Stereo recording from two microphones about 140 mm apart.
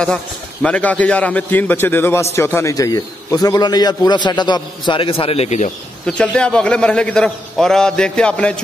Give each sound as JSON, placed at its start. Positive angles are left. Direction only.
{"t": 0.0, "sound": "a man's voice", "side_deg": 5}
{"t": 6.0, "sound": "a man's voice", "side_deg": 5}